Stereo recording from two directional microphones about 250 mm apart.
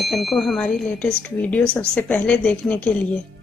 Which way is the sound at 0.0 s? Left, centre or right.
Centre.